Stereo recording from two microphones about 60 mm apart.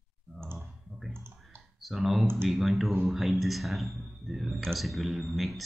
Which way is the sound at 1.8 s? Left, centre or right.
Centre.